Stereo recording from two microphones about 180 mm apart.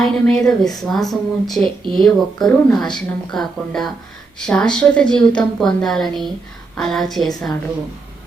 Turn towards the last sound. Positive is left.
turn(degrees=0)  # may be behind; listen again after turning